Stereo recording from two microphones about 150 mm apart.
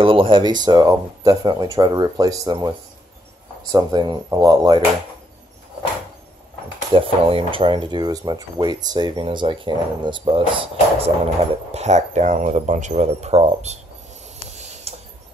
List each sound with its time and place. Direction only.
0.0 s speech: 35° right (ahead or behind)
6.9 s speech: 40° right (ahead or behind)
11.7 s speech: 50° right (ahead or behind)
14.9 s a sound: 40° right (ahead or behind)